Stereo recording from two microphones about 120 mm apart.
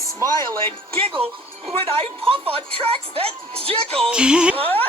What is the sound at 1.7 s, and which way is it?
A woman's voice, 55° right (ahead or behind).